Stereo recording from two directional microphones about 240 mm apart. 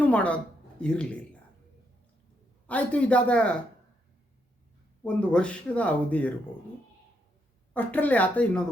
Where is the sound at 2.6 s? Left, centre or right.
Centre.